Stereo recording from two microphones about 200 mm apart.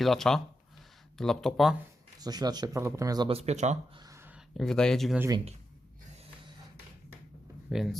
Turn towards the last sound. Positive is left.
turn(degrees=0)  # may be behind; listen again after turning